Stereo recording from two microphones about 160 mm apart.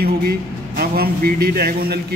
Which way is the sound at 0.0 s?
75° right (ahead or behind).